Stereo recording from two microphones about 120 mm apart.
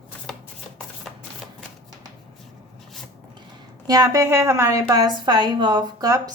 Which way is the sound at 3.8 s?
30° right (ahead or behind).